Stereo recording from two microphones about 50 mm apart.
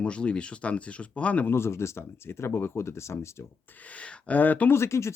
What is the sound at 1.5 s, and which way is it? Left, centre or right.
Speech, left.